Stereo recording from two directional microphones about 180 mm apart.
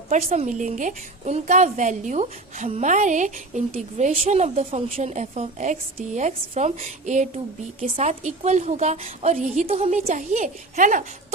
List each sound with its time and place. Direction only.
0.1 s a woman's voice: 35° right (ahead or behind)